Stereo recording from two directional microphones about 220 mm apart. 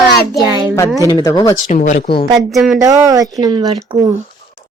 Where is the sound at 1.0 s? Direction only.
15° left (ahead or behind).